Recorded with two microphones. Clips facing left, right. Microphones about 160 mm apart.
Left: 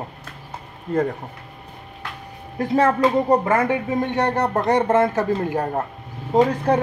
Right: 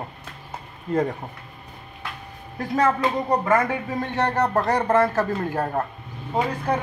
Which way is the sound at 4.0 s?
15° left (ahead or behind).